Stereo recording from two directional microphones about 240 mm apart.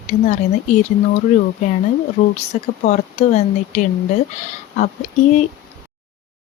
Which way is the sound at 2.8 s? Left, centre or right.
Left.